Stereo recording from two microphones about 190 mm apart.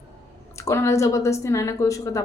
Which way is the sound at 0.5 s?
15° left (ahead or behind).